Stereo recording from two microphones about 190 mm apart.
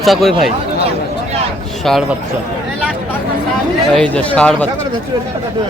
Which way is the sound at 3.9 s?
5° left (ahead or behind).